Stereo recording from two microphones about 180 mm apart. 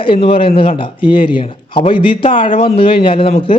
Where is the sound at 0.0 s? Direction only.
30° left (ahead or behind).